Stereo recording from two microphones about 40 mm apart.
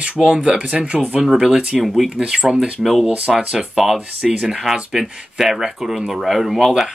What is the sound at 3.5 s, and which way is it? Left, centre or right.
Speech, centre.